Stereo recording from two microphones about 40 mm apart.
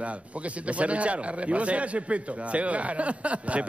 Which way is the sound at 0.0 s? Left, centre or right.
Right.